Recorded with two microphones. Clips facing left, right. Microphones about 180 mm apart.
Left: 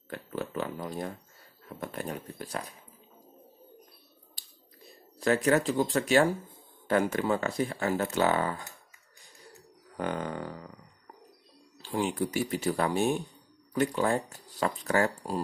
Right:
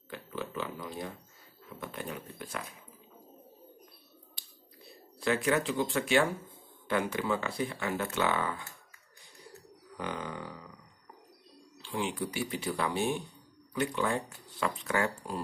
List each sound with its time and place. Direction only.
0.1 s pig: 45° left (ahead or behind)
1.7 s speech: 45° left (ahead or behind)
4.4 s finger snapping: 40° left (ahead or behind)
5.2 s speech: 40° left (ahead or behind)
9.9 s a sound: 50° left (ahead or behind)
11.8 s speech: 40° left (ahead or behind)